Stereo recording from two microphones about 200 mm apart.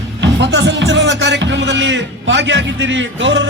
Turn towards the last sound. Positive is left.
turn(degrees=-65)  # may be behind; listen again after turning